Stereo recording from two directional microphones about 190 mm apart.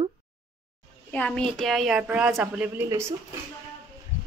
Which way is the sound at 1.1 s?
5° left (ahead or behind).